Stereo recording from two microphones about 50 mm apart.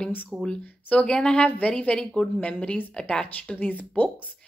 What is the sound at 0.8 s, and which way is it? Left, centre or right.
Speech, centre.